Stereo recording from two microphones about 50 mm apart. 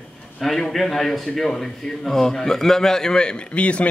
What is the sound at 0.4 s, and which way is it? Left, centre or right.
A man's voice, centre.